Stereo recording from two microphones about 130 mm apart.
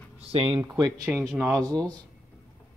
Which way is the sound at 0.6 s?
20° right (ahead or behind).